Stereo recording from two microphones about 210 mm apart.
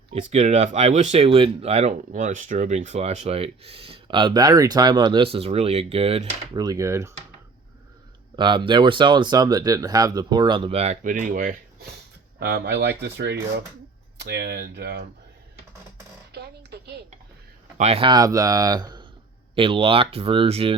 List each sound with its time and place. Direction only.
0.1 s speech: 30° right (ahead or behind); by 7.1 s 15° right (ahead or behind)
8.4 s speech: 20° right (ahead or behind); by 15.0 s 50° right (ahead or behind)
16.3 s a sound: 50° right (ahead or behind)
17.7 s speech: 30° right (ahead or behind)